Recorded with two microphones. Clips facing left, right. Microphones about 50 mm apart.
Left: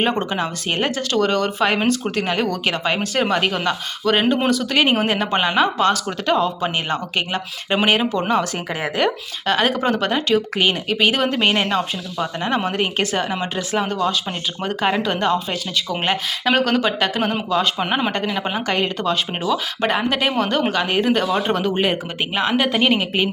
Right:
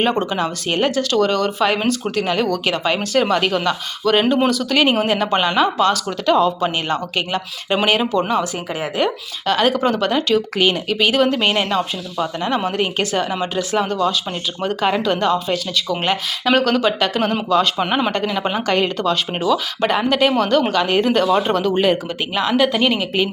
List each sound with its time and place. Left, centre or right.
0.2 s a woman's voice: left
9.5 s a woman's voice: left; by 18.9 s centre
18.9 s speech: left
22.4 s a woman's voice: left